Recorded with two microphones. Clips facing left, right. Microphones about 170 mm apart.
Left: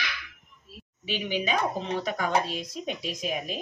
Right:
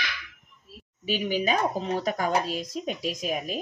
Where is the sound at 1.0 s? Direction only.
45° right (ahead or behind).